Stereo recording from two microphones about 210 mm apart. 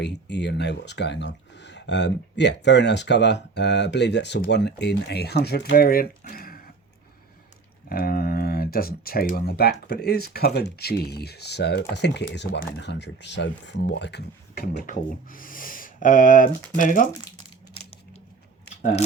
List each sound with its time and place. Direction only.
0.0 s speech: 55° left (ahead or behind)
7.9 s speech: 45° left (ahead or behind)